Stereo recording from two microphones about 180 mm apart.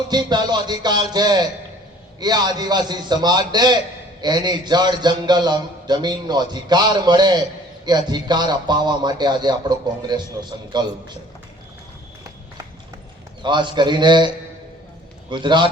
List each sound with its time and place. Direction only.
0.1 s a man's voice: 25° right (ahead or behind)
13.4 s a man's voice: 25° right (ahead or behind)
15.3 s a man's voice: 25° right (ahead or behind)